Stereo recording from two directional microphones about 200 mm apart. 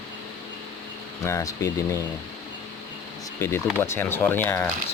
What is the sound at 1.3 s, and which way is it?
Speech, 15° left (ahead or behind).